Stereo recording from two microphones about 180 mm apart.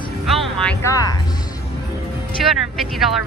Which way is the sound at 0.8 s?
15° left (ahead or behind).